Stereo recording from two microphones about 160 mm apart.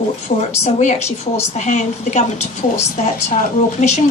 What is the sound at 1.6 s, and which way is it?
Speech, 50° left (ahead or behind).